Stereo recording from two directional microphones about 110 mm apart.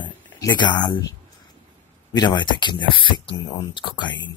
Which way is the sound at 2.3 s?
45° left (ahead or behind).